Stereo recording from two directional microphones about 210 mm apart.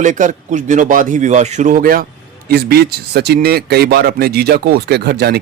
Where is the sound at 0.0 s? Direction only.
35° right (ahead or behind).